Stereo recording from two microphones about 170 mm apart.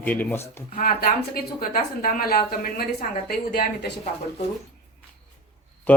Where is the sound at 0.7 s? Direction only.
60° left (ahead or behind).